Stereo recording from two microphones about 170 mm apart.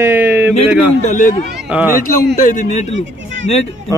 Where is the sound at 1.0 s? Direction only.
45° left (ahead or behind).